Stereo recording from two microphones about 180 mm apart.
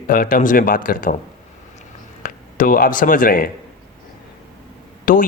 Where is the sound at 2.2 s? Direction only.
50° left (ahead or behind).